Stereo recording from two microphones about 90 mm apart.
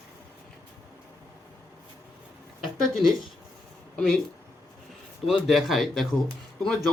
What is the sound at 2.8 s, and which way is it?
Speech, 5° left (ahead or behind).